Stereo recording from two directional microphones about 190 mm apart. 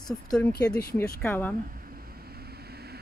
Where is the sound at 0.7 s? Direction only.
55° left (ahead or behind).